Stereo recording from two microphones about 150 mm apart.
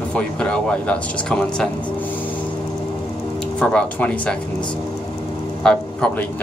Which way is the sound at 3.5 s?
10° left (ahead or behind).